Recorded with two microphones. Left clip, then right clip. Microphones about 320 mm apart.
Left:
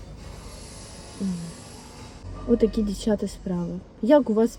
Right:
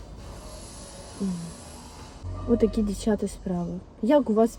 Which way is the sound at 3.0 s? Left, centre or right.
Centre.